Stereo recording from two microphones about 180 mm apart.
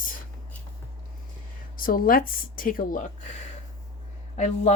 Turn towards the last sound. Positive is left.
turn(degrees=40)  # may be behind; listen again after turning